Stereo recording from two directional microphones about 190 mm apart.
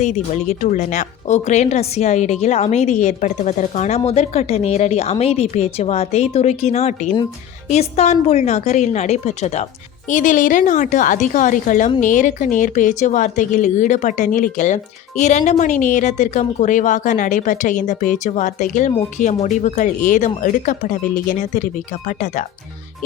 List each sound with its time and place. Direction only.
0.6 s a woman's voice: 40° left (ahead or behind)